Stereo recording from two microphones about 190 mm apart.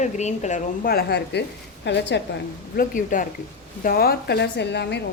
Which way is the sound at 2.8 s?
45° left (ahead or behind).